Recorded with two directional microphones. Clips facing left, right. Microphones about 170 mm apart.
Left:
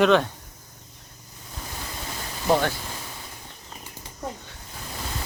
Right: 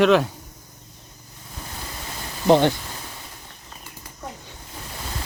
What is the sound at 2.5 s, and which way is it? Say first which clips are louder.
Speech: right 6 dB; 20° right (ahead or behind).